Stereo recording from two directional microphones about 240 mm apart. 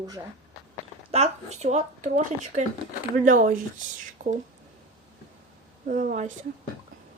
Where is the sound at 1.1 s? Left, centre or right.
Right.